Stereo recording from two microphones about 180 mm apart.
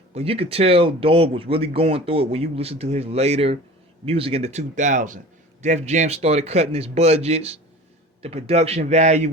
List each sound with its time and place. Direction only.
0.1 s speech: 35° right (ahead or behind)